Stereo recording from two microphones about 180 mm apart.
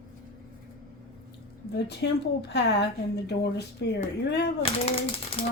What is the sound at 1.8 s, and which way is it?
Speech, 70° left (ahead or behind).